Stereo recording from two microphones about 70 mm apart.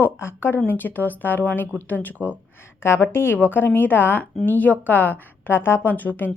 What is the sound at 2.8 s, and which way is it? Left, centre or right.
A woman's voice, left.